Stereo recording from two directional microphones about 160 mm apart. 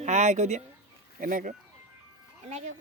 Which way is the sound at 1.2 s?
55° right (ahead or behind).